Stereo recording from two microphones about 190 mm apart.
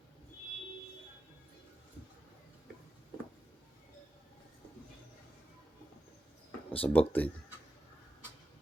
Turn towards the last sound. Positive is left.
turn(degrees=10)  # may be behind; listen again after turning